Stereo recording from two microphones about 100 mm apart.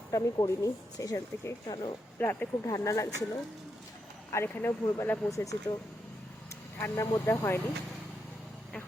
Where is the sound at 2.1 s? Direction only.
20° left (ahead or behind).